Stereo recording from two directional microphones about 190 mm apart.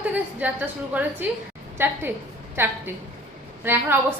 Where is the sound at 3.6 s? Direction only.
10° right (ahead or behind).